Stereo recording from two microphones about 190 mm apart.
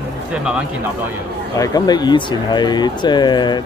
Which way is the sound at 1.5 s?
20° left (ahead or behind).